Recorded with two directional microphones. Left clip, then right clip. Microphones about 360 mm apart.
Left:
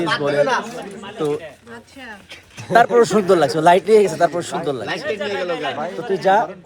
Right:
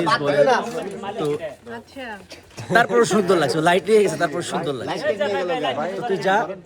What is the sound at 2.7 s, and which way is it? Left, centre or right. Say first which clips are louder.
A man's voice: left 3 dB; centre.